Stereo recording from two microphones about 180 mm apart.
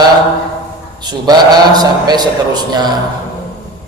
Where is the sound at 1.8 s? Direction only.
20° right (ahead or behind).